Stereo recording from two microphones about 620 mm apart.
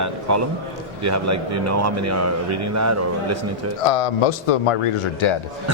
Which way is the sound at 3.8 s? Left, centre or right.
Left.